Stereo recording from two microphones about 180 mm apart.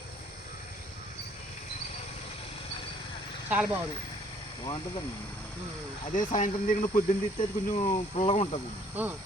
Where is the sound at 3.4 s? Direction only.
10° right (ahead or behind).